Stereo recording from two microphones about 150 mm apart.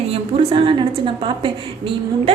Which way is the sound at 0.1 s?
35° right (ahead or behind).